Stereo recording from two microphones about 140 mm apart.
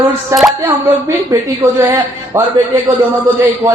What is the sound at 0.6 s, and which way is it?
A woman's voice, 20° right (ahead or behind).